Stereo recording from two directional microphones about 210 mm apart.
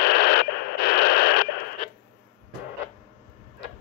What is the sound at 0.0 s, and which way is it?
Radio, 50° left (ahead or behind).